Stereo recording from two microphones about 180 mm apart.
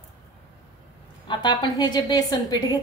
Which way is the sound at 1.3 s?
25° left (ahead or behind).